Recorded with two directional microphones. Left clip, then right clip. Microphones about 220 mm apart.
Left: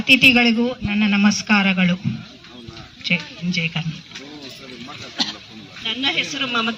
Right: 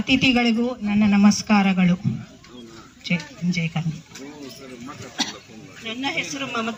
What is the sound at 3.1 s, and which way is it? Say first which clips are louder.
Speech: left 5 dB; 50° right (ahead or behind).